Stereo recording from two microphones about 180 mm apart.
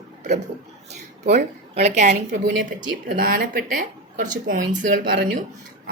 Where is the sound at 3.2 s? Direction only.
55° right (ahead or behind).